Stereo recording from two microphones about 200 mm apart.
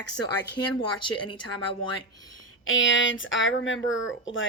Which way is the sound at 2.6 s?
75° left (ahead or behind).